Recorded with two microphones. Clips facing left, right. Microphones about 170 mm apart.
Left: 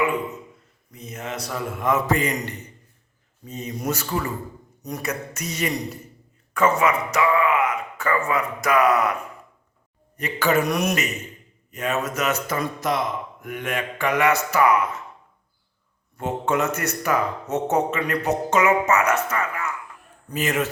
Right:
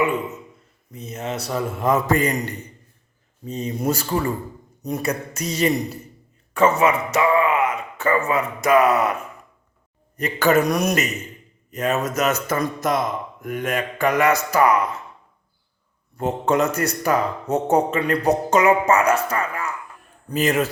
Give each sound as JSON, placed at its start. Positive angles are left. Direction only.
{"t": 0.9, "sound": "a man's voice", "side_deg": -25}
{"t": 3.4, "sound": "a man's voice", "side_deg": -30}
{"t": 10.2, "sound": "a man's voice", "side_deg": -45}
{"t": 16.1, "sound": "a man's voice", "side_deg": -35}